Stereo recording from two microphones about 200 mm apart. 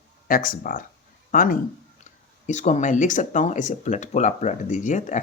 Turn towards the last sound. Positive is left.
turn(degrees=35)  # may be behind; listen again after turning